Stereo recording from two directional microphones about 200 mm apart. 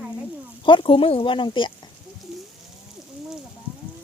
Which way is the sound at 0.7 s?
25° left (ahead or behind).